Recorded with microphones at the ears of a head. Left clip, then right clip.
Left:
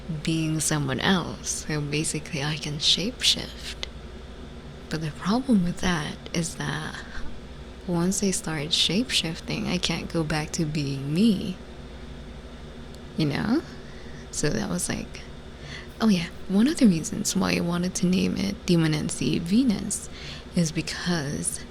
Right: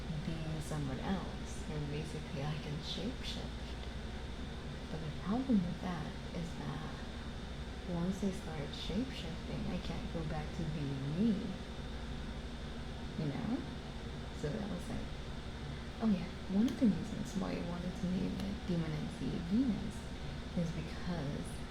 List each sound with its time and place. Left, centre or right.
0.1 s speech: left
4.9 s speech: left
13.1 s speech: left